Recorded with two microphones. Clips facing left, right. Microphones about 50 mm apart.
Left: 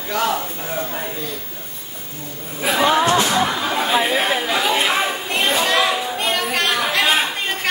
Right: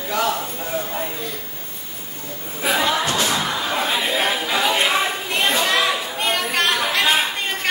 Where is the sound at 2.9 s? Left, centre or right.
Left.